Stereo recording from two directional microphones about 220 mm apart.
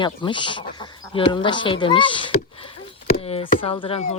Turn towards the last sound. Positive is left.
turn(degrees=30)  # may be behind; listen again after turning